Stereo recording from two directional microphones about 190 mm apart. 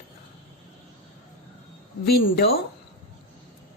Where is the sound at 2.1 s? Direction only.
60° left (ahead or behind).